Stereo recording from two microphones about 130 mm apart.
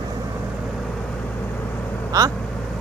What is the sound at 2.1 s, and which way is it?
Speech, 30° right (ahead or behind).